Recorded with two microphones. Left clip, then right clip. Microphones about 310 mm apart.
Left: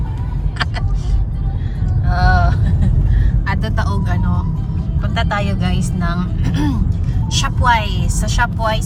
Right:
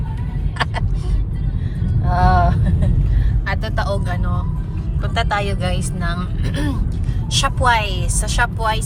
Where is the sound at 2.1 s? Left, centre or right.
Centre.